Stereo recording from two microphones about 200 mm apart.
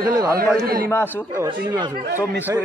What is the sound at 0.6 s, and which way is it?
Speech, 50° right (ahead or behind).